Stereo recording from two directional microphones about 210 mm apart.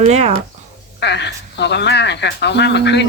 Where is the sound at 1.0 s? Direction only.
55° left (ahead or behind).